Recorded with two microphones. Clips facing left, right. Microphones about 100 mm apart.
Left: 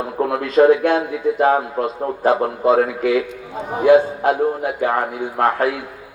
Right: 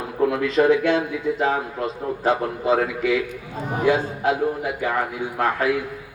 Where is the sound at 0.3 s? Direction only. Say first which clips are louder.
Left 6 dB; 50° left (ahead or behind).